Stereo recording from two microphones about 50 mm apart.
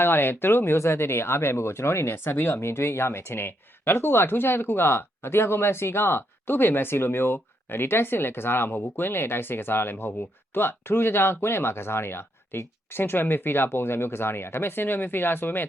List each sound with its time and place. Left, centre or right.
0.0 s speech: left